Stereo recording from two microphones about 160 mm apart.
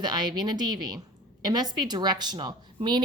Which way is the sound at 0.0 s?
25° right (ahead or behind).